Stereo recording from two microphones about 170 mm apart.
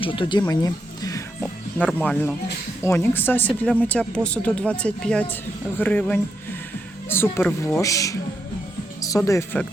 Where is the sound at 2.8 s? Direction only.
15° left (ahead or behind).